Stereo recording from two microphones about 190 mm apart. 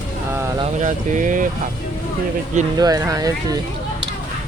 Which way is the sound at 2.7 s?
20° right (ahead or behind).